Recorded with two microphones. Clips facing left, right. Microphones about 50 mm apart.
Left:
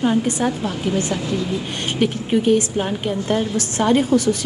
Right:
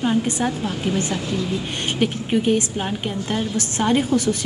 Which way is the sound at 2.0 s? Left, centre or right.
Centre.